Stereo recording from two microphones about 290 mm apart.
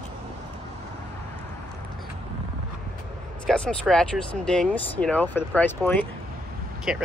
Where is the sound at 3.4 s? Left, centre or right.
Centre.